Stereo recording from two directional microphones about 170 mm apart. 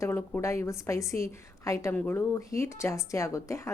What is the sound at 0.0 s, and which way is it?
A woman's voice, 15° left (ahead or behind).